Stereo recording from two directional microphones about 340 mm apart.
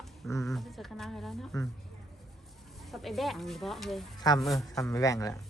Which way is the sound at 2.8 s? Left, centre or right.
Centre.